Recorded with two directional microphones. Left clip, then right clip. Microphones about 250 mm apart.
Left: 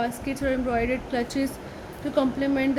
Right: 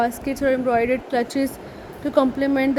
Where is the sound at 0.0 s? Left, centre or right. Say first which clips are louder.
Right 6 dB; right.